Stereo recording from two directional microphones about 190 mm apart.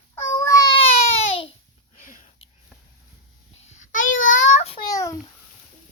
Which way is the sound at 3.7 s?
40° left (ahead or behind).